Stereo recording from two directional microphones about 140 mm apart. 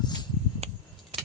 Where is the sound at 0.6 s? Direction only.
45° right (ahead or behind).